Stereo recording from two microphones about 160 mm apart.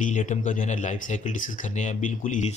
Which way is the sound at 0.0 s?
55° left (ahead or behind).